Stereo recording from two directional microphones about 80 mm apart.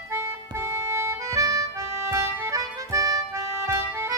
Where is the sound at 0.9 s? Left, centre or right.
Right.